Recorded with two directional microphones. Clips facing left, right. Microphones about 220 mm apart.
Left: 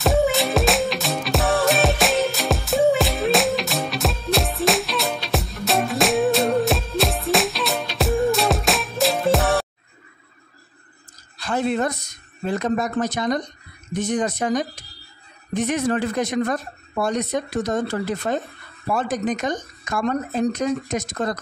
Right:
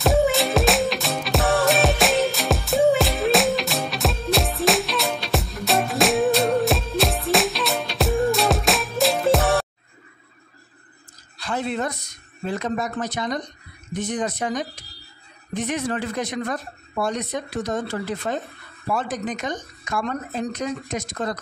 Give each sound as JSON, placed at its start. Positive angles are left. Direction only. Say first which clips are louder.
{"t": 0.0, "sound": "music", "louder": "even", "side_deg": 0}
{"t": 11.3, "sound": "a sound", "louder": "left 4 dB", "side_deg": 45}
{"t": 12.4, "sound": "speech", "louder": "left 3 dB", "side_deg": 50}